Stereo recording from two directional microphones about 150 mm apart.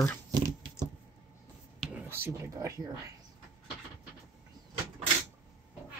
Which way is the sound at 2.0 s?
15° right (ahead or behind).